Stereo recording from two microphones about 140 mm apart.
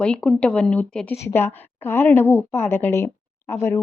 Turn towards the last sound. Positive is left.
turn(degrees=20)  # may be behind; listen again after turning